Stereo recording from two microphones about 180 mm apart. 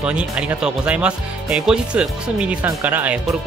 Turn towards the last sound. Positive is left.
turn(degrees=-5)  # may be behind; listen again after turning